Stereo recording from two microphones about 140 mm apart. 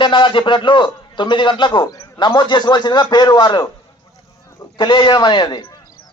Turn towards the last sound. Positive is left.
turn(degrees=30)  # may be behind; listen again after turning